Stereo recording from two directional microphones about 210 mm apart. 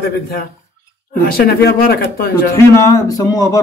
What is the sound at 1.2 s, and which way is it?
Speech, 45° left (ahead or behind).